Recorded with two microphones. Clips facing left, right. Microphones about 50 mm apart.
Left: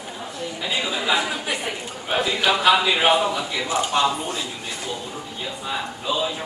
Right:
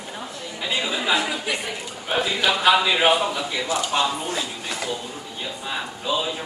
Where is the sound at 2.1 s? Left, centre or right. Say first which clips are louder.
Left 1 dB; centre.